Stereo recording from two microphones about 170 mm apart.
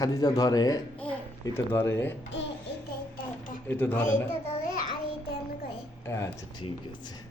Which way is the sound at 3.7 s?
10° left (ahead or behind).